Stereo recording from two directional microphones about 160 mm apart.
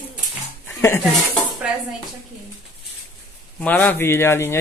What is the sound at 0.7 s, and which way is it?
Speech, 15° left (ahead or behind).